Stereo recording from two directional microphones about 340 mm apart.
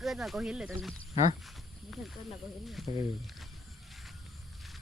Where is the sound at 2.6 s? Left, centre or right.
Centre.